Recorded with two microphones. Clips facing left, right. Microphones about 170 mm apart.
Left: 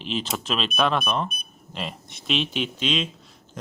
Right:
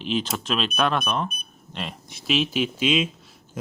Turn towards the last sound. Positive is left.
turn(degrees=-5)  # may be behind; listen again after turning